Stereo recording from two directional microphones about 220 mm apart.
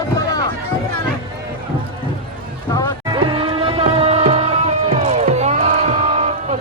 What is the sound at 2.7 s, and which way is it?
Music, 15° left (ahead or behind).